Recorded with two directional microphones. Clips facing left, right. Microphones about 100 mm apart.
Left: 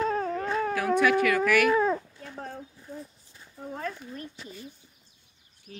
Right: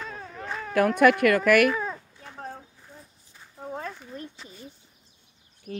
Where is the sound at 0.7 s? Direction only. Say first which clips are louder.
Right 5 dB; 55° right (ahead or behind).